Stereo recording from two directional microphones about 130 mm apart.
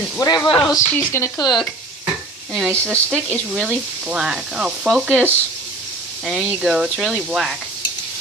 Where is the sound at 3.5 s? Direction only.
Centre (ahead or behind).